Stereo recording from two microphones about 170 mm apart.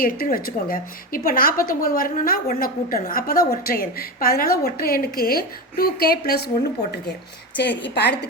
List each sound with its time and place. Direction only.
0.0 s a woman's voice: 55° left (ahead or behind)
7.5 s a woman's voice: 90° left